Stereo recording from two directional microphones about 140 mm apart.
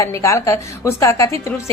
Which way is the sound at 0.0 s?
20° left (ahead or behind).